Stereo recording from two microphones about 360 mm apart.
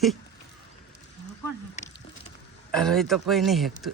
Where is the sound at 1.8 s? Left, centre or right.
Centre.